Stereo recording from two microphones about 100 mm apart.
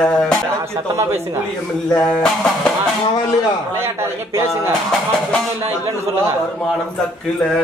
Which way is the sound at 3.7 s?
25° right (ahead or behind).